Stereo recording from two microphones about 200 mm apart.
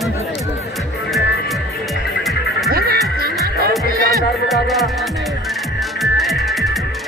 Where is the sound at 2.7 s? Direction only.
50° right (ahead or behind).